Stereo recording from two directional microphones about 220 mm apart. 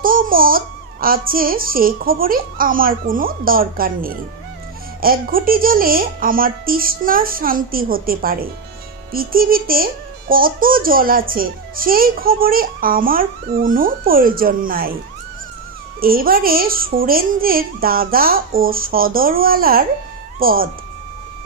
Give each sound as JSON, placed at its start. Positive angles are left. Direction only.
{"t": 0.0, "sound": "babbling", "side_deg": -40}
{"t": 1.0, "sound": "speech", "side_deg": -40}
{"t": 16.0, "sound": "speech", "side_deg": -40}